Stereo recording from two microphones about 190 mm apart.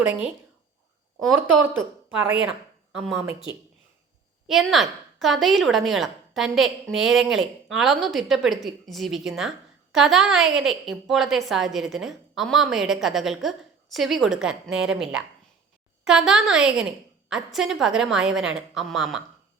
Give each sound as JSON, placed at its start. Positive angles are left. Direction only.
{"t": 1.4, "sound": "speech", "side_deg": -10}
{"t": 4.4, "sound": "a woman's voice", "side_deg": 0}